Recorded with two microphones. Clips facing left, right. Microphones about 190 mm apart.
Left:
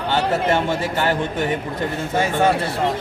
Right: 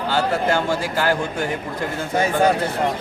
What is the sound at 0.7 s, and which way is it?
Speech, centre (ahead or behind).